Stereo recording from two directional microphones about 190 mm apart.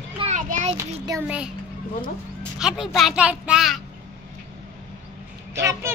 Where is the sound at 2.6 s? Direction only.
Centre (ahead or behind).